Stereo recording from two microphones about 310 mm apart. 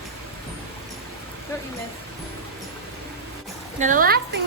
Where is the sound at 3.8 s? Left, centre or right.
Right.